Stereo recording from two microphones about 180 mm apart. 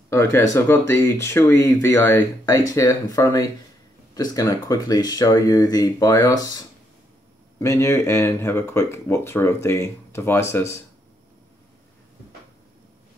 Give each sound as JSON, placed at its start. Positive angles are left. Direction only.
{"t": 0.1, "sound": "speech", "side_deg": 15}